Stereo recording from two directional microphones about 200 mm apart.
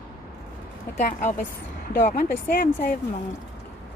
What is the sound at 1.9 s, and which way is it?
Speech, 40° left (ahead or behind).